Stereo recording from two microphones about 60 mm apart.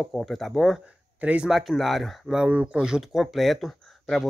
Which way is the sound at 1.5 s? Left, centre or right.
Centre.